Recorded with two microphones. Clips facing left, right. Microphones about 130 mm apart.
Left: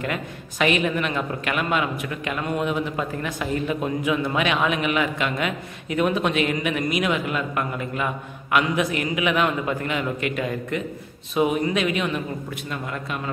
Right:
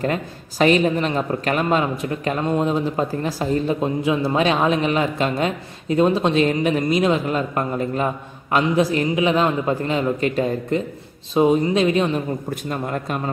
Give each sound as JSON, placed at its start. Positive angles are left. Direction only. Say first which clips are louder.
{"t": 0.0, "sound": "a woman's voice", "louder": "right 5 dB", "side_deg": -35}